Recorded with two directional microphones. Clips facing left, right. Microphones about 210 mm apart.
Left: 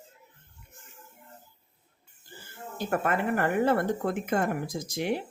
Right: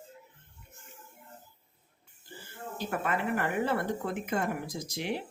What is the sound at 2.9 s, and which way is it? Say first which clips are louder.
Speech: left 4 dB; 50° left (ahead or behind).